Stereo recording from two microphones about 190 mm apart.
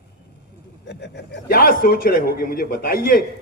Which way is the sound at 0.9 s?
65° left (ahead or behind).